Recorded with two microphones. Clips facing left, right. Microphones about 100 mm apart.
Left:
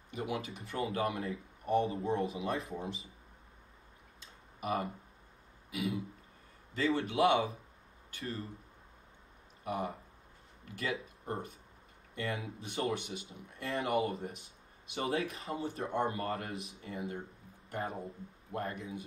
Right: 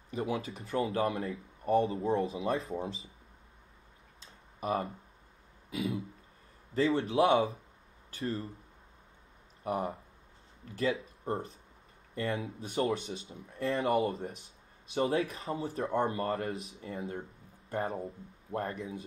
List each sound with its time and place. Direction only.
0.1 s speech: 30° right (ahead or behind)
4.2 s tick-tock: 30° right (ahead or behind)
5.7 s speech: 30° right (ahead or behind)
9.7 s speech: 40° right (ahead or behind)